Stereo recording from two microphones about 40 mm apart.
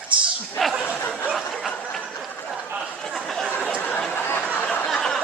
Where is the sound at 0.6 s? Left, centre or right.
Centre.